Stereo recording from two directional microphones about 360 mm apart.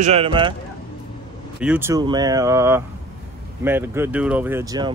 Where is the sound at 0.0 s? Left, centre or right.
Centre.